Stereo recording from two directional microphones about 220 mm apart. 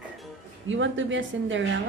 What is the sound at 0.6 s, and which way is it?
A woman's voice, 60° right (ahead or behind).